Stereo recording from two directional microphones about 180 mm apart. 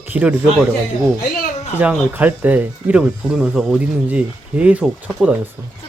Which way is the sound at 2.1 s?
10° right (ahead or behind).